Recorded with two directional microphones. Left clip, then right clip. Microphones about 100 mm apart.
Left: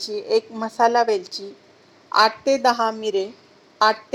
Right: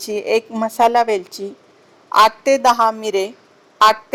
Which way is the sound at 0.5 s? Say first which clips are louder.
Right 4 dB; 30° right (ahead or behind).